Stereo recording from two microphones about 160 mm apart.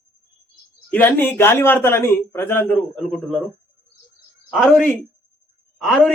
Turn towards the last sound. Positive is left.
turn(degrees=5)  # may be behind; listen again after turning